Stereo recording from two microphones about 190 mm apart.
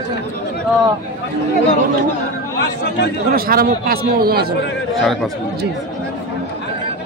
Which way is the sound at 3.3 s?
50° right (ahead or behind).